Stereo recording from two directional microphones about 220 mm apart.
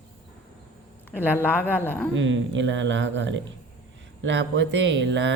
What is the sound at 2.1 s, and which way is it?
Speech, 55° right (ahead or behind).